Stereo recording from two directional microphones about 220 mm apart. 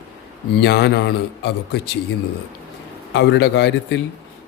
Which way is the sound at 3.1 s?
50° left (ahead or behind).